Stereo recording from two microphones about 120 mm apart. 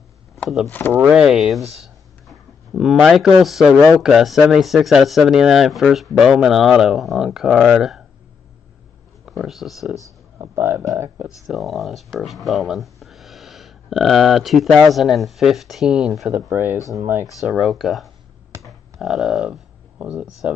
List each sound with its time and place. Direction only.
0.7 s speech: 15° left (ahead or behind)
1.1 s speech: 5° right (ahead or behind)
1.8 s a sound: centre (ahead or behind)
4.0 s speech: 5° right (ahead or behind)
9.2 s speech: centre (ahead or behind)
10.4 s speech: 20° right (ahead or behind)
11.4 s speech: centre (ahead or behind)
16.3 s speech: 20° right (ahead or behind)
17.5 s speech: centre (ahead or behind)